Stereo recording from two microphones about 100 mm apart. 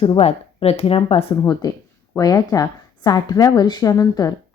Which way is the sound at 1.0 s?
65° left (ahead or behind).